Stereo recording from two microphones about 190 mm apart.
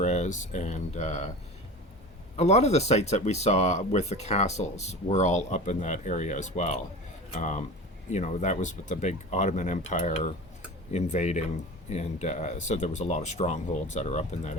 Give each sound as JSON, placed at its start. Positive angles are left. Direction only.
{"t": 0.0, "sound": "speech", "side_deg": 35}
{"t": 2.3, "sound": "speech", "side_deg": 35}